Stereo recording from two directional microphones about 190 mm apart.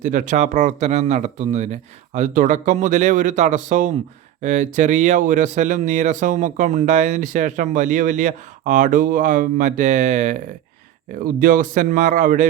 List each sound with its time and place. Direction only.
0.0 s a man's voice: 45° right (ahead or behind)